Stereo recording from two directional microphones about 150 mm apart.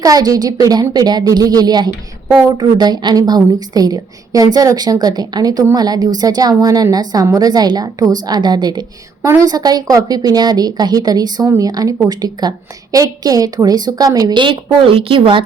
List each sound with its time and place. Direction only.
0.0 s a woman's voice: 25° right (ahead or behind)